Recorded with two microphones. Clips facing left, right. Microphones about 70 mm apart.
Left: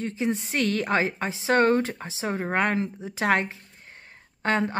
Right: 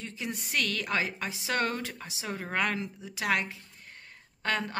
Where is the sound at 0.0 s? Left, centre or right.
Left.